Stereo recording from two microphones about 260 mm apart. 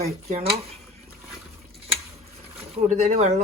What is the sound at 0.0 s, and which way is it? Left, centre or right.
Speech, right.